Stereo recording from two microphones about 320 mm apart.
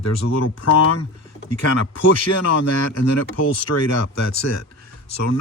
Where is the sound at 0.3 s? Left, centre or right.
Left.